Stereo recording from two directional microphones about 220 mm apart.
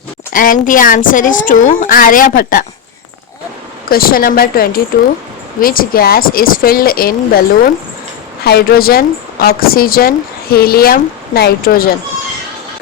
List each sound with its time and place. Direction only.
0.3 s a woman's voice: 40° left (ahead or behind)
3.8 s a woman's voice: 40° left (ahead or behind)